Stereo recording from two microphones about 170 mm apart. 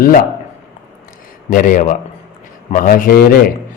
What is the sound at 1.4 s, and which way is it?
A man's voice, 50° left (ahead or behind).